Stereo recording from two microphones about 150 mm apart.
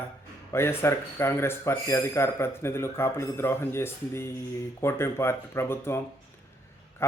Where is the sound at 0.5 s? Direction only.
15° left (ahead or behind).